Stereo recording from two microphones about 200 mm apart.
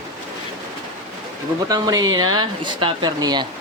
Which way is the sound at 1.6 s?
20° right (ahead or behind).